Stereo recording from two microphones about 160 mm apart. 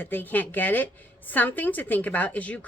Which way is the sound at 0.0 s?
10° left (ahead or behind).